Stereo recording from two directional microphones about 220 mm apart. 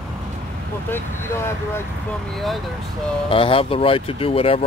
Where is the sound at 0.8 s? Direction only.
10° left (ahead or behind).